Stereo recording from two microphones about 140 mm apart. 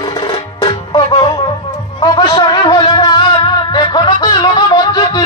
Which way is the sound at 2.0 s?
30° left (ahead or behind).